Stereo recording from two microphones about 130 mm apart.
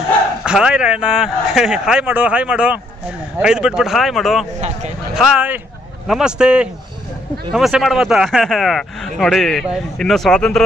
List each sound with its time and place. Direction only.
0.5 s a man's voice: 5° right (ahead or behind)
4.6 s speech: 60° right (ahead or behind)
5.1 s a man's voice: 10° right (ahead or behind)